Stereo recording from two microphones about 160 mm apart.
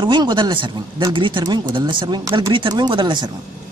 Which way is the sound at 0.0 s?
30° right (ahead or behind).